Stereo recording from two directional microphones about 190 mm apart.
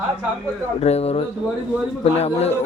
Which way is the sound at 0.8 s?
35° left (ahead or behind).